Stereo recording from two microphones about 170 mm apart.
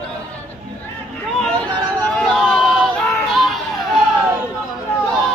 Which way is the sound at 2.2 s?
5° left (ahead or behind).